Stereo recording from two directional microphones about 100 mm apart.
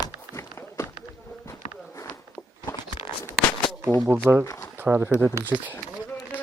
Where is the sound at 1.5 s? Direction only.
30° left (ahead or behind).